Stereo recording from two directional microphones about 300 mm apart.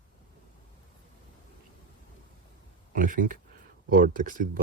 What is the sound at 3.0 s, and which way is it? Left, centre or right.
Speech, right.